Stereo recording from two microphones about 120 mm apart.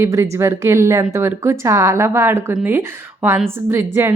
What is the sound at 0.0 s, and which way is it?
A woman's voice, 25° right (ahead or behind).